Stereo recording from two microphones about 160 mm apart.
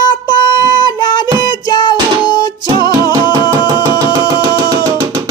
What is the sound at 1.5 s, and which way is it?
Music, 25° left (ahead or behind).